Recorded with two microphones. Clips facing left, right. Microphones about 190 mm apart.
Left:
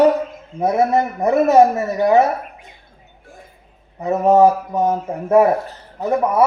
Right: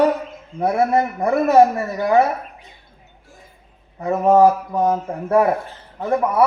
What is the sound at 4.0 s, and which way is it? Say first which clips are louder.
Speech: left 1 dB; 20° left (ahead or behind).